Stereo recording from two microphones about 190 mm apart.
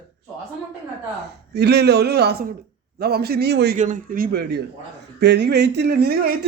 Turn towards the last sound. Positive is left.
turn(degrees=-55)  # may be behind; listen again after turning